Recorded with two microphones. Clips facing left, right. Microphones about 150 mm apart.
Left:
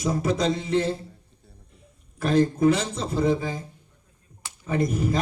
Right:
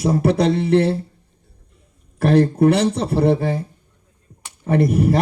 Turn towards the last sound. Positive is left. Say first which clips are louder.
# right 7 dB
turn(degrees=-65)  # may be behind; listen again after turning